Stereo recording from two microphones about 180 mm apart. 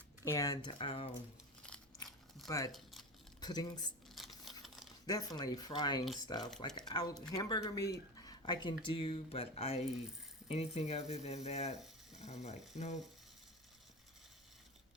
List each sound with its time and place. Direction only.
0.3 s speech: 20° left (ahead or behind)
1.6 s biting: 5° left (ahead or behind)
2.7 s crumpling: centre (ahead or behind)
3.4 s speech: 20° left (ahead or behind)
4.1 s a sound: centre (ahead or behind)
5.0 s speech: 20° left (ahead or behind); by 13.0 s 40° left (ahead or behind)